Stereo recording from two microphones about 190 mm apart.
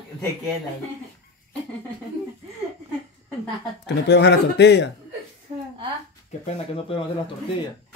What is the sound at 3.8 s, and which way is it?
Speech, 65° left (ahead or behind).